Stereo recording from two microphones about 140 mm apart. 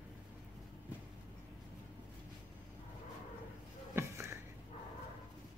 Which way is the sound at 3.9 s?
20° right (ahead or behind).